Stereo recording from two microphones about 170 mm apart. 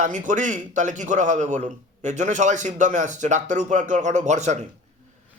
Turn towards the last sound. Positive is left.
turn(degrees=-45)  # may be behind; listen again after turning